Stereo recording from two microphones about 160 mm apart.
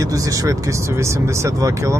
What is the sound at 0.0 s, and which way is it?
Speech, 20° right (ahead or behind).